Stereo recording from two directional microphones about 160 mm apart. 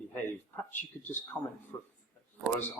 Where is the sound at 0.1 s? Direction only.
10° left (ahead or behind).